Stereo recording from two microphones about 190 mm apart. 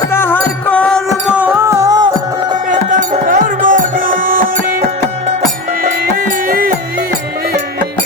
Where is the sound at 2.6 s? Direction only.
45° right (ahead or behind).